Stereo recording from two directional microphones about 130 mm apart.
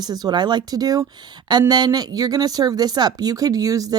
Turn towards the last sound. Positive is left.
turn(degrees=-25)  # may be behind; listen again after turning